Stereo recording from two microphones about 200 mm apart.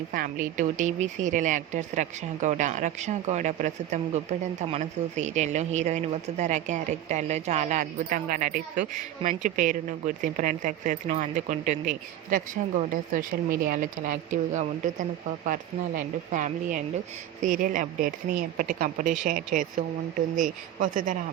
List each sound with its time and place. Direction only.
0.1 s speech: 45° right (ahead or behind)
12.9 s speech: 45° right (ahead or behind)